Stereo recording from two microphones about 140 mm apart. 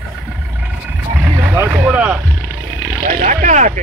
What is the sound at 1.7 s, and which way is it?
Boat, 10° right (ahead or behind).